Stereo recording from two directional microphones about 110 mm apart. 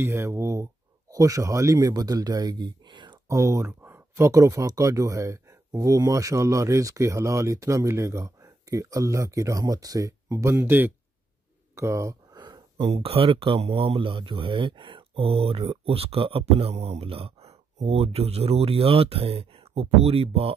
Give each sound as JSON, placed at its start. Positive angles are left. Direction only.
{"t": 0.0, "sound": "speech", "side_deg": -20}
{"t": 3.3, "sound": "speech", "side_deg": -30}
{"t": 12.4, "sound": "speech", "side_deg": -40}